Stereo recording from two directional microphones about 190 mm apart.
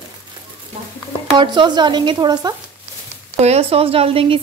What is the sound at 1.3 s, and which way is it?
Speech, 25° right (ahead or behind).